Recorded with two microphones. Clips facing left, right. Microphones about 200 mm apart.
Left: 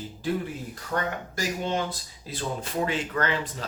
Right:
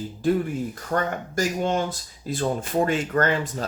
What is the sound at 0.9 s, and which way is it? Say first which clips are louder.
Speech: right 4 dB; 50° right (ahead or behind).